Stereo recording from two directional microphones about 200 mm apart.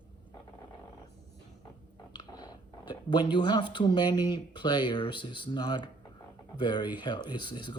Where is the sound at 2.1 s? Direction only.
20° left (ahead or behind).